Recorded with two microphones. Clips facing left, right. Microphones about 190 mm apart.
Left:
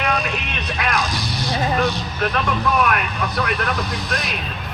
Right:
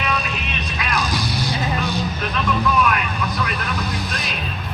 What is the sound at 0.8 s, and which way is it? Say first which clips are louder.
Vehicle: left 4 dB; 55° left (ahead or behind).